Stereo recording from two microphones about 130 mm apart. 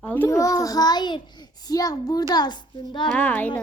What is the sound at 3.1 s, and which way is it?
Speech, 10° left (ahead or behind).